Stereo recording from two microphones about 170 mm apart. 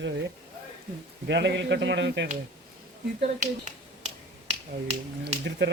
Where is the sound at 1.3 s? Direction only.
90° right.